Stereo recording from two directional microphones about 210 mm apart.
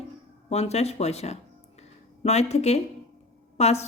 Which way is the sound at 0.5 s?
30° left (ahead or behind).